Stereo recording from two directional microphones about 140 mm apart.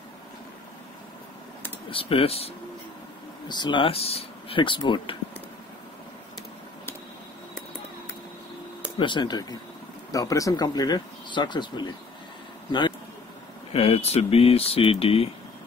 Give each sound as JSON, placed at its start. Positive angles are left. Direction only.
{"t": 1.9, "sound": "speech", "side_deg": 40}
{"t": 3.4, "sound": "speech", "side_deg": 30}
{"t": 8.9, "sound": "speech", "side_deg": 35}
{"t": 13.7, "sound": "speech", "side_deg": 45}